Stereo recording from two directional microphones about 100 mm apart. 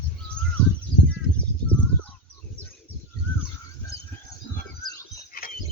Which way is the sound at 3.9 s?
65° right (ahead or behind).